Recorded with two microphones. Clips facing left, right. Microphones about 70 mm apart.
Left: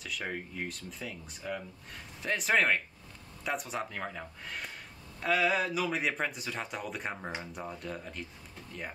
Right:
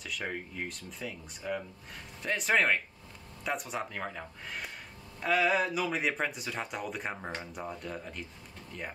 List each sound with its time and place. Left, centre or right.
0.0 s speech: centre